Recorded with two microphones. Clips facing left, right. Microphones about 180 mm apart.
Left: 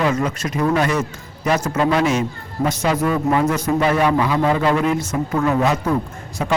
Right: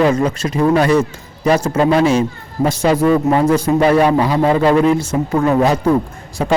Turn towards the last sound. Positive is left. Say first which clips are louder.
# right 5 dB
turn(degrees=-35)  # may be behind; listen again after turning